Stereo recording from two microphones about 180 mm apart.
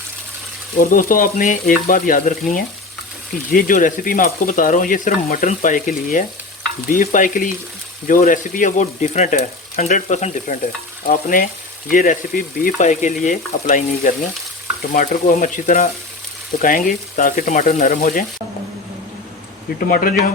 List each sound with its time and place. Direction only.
0.8 s speech: 50° left (ahead or behind)
19.9 s speech: 50° left (ahead or behind)